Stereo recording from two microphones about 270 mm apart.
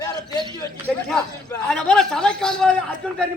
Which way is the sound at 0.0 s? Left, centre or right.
Centre.